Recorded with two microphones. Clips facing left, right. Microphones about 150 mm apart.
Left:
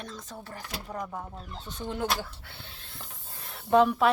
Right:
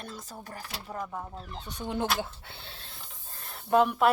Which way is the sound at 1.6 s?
15° right (ahead or behind).